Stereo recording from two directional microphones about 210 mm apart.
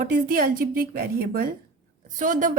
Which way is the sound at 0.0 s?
45° right (ahead or behind).